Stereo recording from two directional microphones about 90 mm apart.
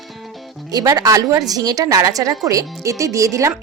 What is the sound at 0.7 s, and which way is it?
A woman's voice, 45° right (ahead or behind).